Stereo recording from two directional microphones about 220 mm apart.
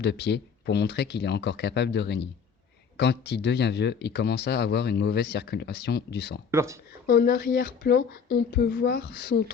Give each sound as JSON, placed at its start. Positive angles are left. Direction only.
{"t": 0.0, "sound": "speech", "side_deg": 50}
{"t": 6.5, "sound": "speech", "side_deg": -10}
{"t": 7.1, "sound": "speech", "side_deg": 45}